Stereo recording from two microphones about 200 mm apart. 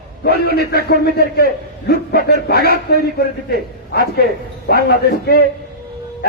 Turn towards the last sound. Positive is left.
turn(degrees=50)  # may be behind; listen again after turning